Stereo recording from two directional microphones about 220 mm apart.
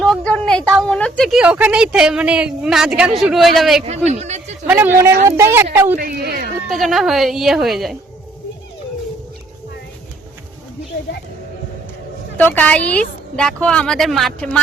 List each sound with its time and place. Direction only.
0.0 s a woman's voice: 5° left (ahead or behind)
3.8 s a man's voice: 30° right (ahead or behind)
4.6 s a woman's voice: 10° right (ahead or behind)
6.0 s speech: 45° right (ahead or behind)
6.7 s a woman's voice: centre (ahead or behind)
12.4 s a woman's voice: 5° left (ahead or behind)